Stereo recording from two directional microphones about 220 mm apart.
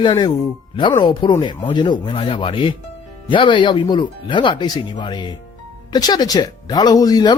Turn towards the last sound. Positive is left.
turn(degrees=15)  # may be behind; listen again after turning